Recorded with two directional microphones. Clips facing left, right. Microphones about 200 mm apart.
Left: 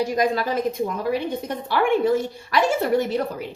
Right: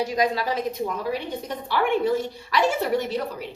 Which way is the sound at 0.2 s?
50° left (ahead or behind).